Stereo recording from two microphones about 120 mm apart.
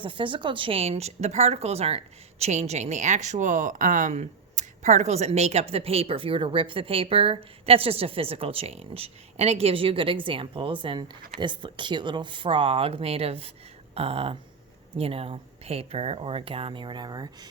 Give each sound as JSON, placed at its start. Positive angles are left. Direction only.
{"t": 0.0, "sound": "a woman's voice", "side_deg": -45}